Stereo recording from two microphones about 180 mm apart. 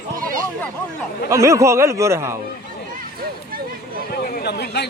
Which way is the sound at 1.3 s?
15° right (ahead or behind).